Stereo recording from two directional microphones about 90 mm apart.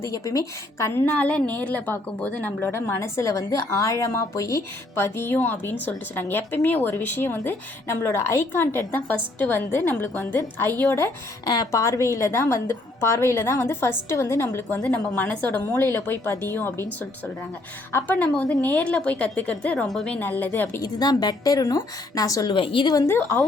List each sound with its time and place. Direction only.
0.0 s a woman's voice: 35° left (ahead or behind)
11.4 s a woman's voice: 50° left (ahead or behind)
11.8 s a woman's voice: 35° left (ahead or behind)
17.9 s a woman's voice: 20° left (ahead or behind)
20.8 s a woman's voice: 45° left (ahead or behind)
22.5 s a woman's voice: 75° left (ahead or behind)